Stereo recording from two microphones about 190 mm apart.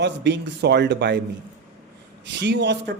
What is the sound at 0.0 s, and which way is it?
A man's voice, 65° right (ahead or behind).